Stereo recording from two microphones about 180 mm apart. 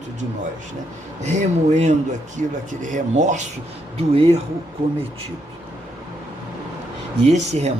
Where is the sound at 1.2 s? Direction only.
40° right (ahead or behind).